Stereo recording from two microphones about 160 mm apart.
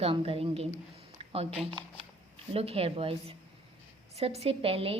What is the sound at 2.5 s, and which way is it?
A woman's voice, 35° right (ahead or behind).